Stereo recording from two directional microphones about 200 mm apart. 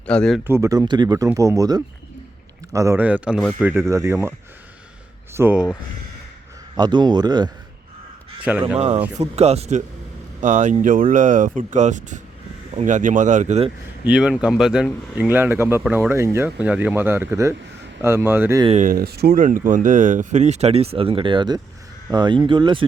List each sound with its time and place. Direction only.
0.0 s speech: 5° left (ahead or behind)
0.4 s speech: 15° right (ahead or behind)
6.7 s speech: 20° right (ahead or behind)
8.5 s speech: 5° right (ahead or behind)
9.2 s speech: 30° right (ahead or behind)
14.0 s speech: 5° right (ahead or behind)
18.6 s speech: 35° right (ahead or behind)